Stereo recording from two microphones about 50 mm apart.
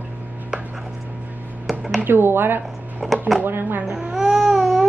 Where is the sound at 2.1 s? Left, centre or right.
Right.